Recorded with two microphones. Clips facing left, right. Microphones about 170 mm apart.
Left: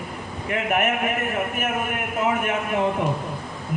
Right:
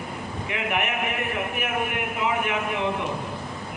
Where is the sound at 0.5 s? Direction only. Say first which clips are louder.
Left 5 dB; 45° left (ahead or behind).